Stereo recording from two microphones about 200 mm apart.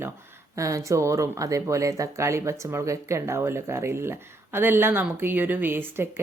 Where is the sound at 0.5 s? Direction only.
15° right (ahead or behind).